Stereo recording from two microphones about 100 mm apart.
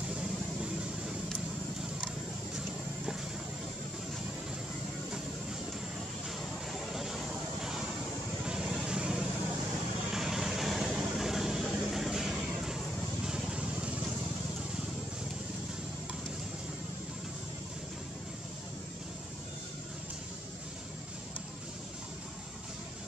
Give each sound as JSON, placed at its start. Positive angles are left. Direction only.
{"t": 0.1, "sound": "vehicle", "side_deg": -10}
{"t": 6.2, "sound": "vehicle", "side_deg": -5}